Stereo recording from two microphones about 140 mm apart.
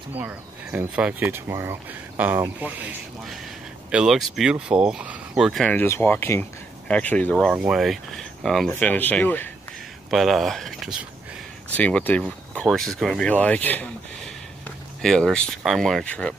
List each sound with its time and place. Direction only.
0.1 s speech: 10° right (ahead or behind)
3.9 s speech: 5° right (ahead or behind)
5.8 s speech: 15° left (ahead or behind)
7.5 s speech: 5° right (ahead or behind); by 9.5 s 15° left (ahead or behind)
10.1 s speech: centre (ahead or behind)
11.7 s speech: 10° left (ahead or behind)